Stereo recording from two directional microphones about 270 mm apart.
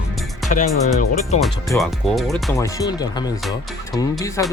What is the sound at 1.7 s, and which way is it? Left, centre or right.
Speech, centre.